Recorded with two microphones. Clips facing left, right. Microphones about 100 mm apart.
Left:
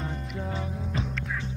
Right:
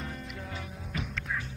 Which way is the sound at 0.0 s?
30° left (ahead or behind).